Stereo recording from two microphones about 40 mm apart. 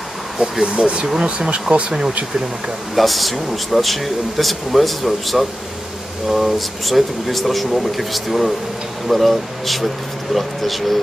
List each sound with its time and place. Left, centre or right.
0.4 s speech: right
1.9 s speech: centre
3.0 s speech: centre